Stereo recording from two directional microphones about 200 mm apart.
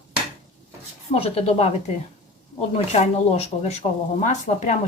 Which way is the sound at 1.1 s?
30° left (ahead or behind).